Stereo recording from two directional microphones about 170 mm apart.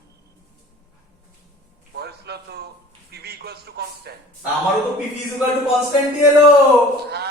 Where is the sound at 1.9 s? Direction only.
70° right (ahead or behind).